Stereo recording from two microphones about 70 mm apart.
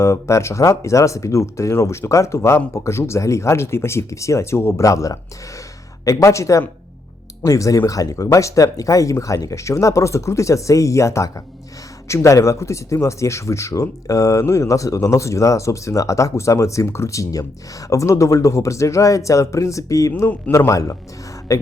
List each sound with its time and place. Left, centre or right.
0.0 s speech: left
4.9 s speech: left